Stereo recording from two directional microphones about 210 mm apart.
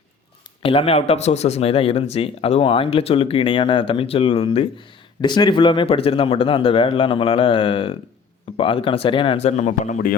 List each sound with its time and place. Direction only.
0.6 s speech: 25° left (ahead or behind)